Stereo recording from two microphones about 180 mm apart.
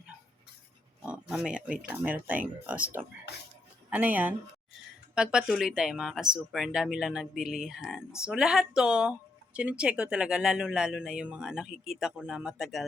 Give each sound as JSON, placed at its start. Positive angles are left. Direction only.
{"t": 1.0, "sound": "speech", "side_deg": -5}
{"t": 3.8, "sound": "speech", "side_deg": -10}